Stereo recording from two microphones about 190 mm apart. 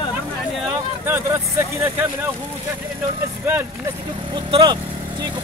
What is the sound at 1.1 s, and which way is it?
Speech, 15° right (ahead or behind).